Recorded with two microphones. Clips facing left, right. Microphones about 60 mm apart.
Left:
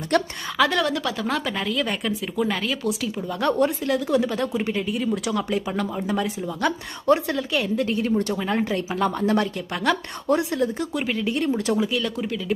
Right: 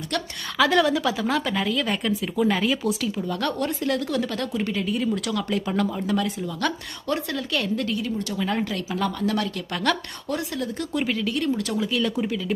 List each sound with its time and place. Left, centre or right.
0.1 s speech: left
0.6 s speech: centre
5.3 s speech: centre
7.9 s speech: left
8.4 s speech: centre
8.6 s speech: left
9.9 s speech: centre
10.2 s speech: left
10.9 s speech: centre
11.2 s speech: left
11.9 s speech: centre